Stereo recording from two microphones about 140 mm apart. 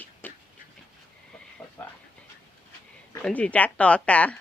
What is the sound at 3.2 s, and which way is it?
Speech, 5° left (ahead or behind).